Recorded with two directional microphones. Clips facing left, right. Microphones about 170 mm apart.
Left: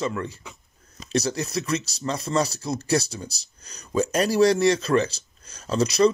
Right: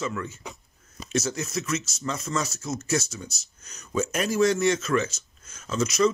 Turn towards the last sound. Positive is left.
turn(degrees=35)  # may be behind; listen again after turning